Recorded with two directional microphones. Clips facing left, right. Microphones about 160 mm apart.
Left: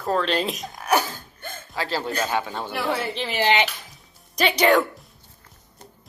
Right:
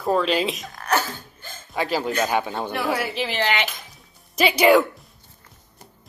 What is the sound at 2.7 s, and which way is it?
Speech, 5° right (ahead or behind).